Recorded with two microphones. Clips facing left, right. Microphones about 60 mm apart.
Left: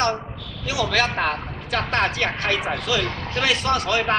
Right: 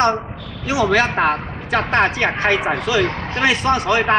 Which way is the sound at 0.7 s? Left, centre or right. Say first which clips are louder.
Right 6 dB; right.